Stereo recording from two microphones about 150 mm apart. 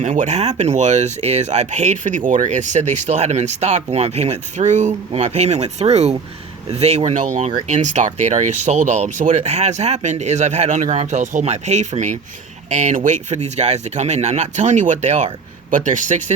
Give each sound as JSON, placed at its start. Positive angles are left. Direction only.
{"t": 0.0, "sound": "speech", "side_deg": -55}